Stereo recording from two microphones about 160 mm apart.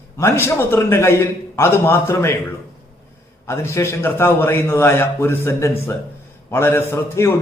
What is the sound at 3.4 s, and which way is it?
A man's voice, 15° left (ahead or behind).